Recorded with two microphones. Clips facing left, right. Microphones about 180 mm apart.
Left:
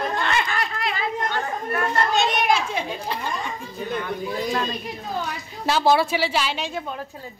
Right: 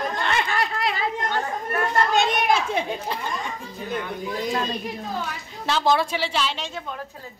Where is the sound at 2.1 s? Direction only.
55° right (ahead or behind).